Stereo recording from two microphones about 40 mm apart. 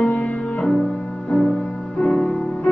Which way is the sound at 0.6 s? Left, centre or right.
Centre.